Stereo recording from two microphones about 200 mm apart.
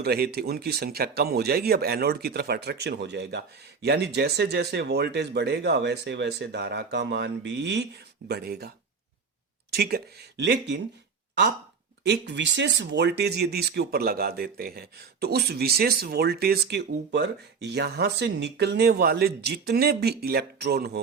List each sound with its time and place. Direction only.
0.0 s speech: 50° right (ahead or behind)
9.7 s speech: 50° right (ahead or behind)
12.0 s speech: 60° right (ahead or behind)